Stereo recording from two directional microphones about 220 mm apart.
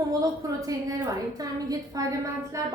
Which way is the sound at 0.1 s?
15° right (ahead or behind).